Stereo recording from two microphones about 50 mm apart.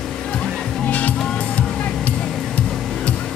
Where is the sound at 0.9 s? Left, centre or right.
Left.